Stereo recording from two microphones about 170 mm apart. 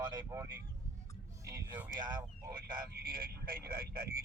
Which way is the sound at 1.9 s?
25° right (ahead or behind).